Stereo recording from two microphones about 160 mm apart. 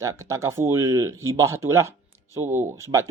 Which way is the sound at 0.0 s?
20° right (ahead or behind).